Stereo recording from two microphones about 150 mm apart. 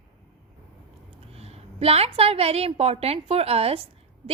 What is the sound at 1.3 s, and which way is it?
A woman's voice, 40° right (ahead or behind).